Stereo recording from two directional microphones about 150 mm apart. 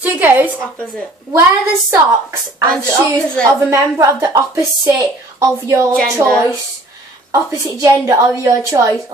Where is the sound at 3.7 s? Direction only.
20° right (ahead or behind).